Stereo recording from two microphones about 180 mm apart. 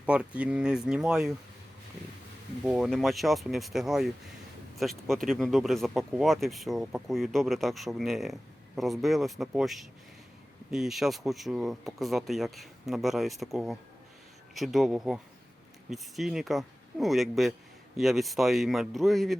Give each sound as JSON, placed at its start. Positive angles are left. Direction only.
{"t": 0.0, "sound": "speech", "side_deg": -5}
{"t": 2.6, "sound": "speech", "side_deg": 0}